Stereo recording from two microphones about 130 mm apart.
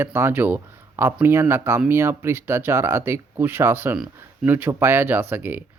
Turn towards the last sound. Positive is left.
turn(degrees=-15)  # may be behind; listen again after turning